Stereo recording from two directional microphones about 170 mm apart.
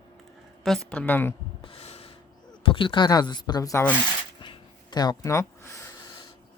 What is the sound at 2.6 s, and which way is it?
Speech, 30° left (ahead or behind).